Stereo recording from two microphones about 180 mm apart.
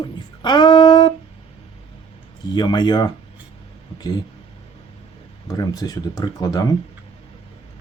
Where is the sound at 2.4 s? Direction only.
25° left (ahead or behind).